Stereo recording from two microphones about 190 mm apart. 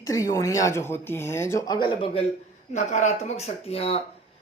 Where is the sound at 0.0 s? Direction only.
15° left (ahead or behind).